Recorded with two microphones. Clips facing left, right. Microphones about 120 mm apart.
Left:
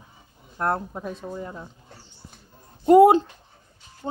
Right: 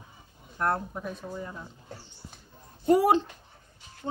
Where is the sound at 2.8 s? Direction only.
25° left (ahead or behind).